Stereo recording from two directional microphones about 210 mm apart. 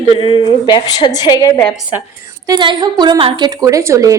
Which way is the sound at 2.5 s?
20° right (ahead or behind).